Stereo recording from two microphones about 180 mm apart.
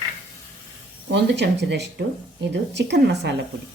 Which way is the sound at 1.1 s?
70° right (ahead or behind).